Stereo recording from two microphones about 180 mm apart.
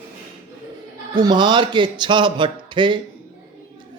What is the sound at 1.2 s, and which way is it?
Speech, 25° right (ahead or behind).